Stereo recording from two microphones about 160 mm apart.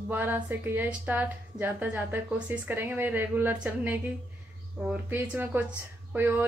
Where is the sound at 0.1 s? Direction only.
10° right (ahead or behind).